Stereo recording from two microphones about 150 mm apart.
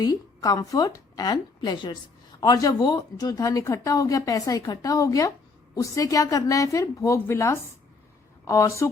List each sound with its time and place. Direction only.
0.0 s a woman's voice: 25° left (ahead or behind)